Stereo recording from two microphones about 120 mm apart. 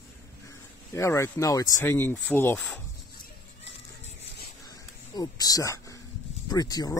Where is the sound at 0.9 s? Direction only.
25° left (ahead or behind).